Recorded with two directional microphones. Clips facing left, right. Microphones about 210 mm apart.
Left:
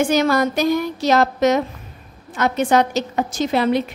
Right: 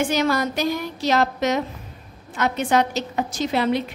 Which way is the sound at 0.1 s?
50° left (ahead or behind).